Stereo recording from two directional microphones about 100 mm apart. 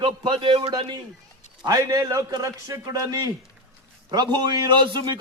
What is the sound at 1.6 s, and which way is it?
A man's voice, 40° right (ahead or behind).